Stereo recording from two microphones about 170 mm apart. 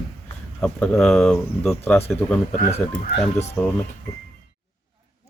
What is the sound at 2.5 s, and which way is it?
Speech, 40° left (ahead or behind).